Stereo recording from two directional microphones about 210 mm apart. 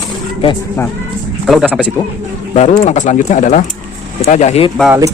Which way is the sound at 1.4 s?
Centre (ahead or behind).